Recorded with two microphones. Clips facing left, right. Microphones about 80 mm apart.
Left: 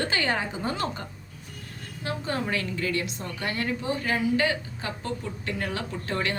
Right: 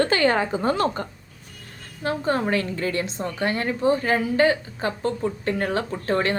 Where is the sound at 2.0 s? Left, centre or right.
Right.